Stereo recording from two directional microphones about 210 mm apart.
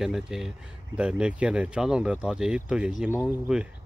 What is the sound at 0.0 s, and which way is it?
Speech, centre (ahead or behind).